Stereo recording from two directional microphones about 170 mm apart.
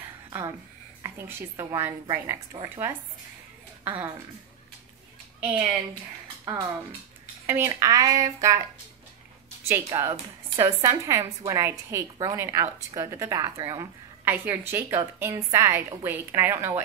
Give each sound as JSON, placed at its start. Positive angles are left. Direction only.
{"t": 1.0, "sound": "a woman's voice", "side_deg": -15}
{"t": 5.4, "sound": "a woman's voice", "side_deg": -10}
{"t": 7.4, "sound": "speech", "side_deg": -15}
{"t": 9.7, "sound": "a woman's voice", "side_deg": -15}